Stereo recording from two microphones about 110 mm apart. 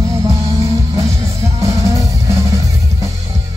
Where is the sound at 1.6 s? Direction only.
30° right (ahead or behind).